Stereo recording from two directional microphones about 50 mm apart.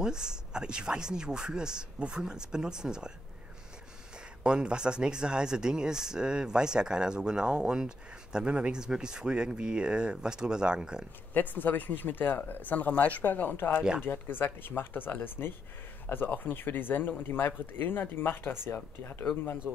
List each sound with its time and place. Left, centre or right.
0.0 s speech: centre
4.4 s speech: centre
11.3 s speech: left
13.7 s speech: centre
14.0 s speech: left